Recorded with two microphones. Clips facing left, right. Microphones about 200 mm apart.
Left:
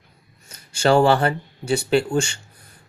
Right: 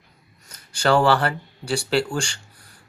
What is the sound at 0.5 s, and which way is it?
Speech, 25° left (ahead or behind).